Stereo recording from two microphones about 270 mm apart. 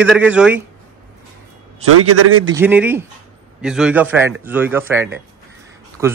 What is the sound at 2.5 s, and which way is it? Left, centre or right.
Speech, centre.